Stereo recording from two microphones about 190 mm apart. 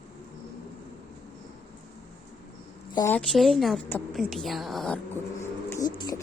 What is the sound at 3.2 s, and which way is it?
Speech, centre (ahead or behind).